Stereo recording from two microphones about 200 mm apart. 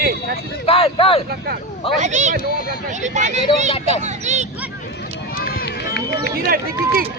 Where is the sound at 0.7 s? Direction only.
30° left (ahead or behind).